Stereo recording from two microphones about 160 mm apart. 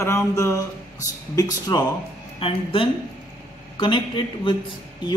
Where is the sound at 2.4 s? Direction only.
35° left (ahead or behind).